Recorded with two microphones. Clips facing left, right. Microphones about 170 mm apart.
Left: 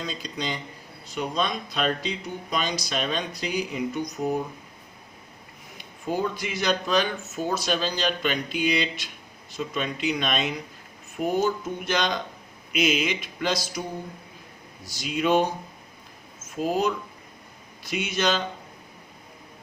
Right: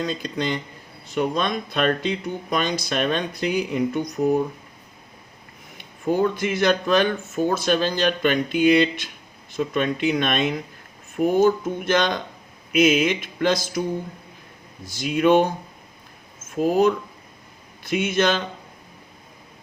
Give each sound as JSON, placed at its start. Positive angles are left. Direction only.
{"t": 0.0, "sound": "speech", "side_deg": -55}
{"t": 6.2, "sound": "speech", "side_deg": -55}
{"t": 14.8, "sound": "speech", "side_deg": -55}
{"t": 16.6, "sound": "speech", "side_deg": -50}